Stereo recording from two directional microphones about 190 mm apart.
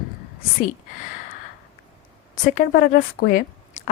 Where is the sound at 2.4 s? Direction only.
50° left (ahead or behind).